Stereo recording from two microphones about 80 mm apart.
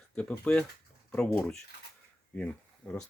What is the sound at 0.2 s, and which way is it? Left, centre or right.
Speech, centre.